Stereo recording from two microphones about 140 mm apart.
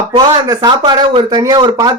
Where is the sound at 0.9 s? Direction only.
30° right (ahead or behind).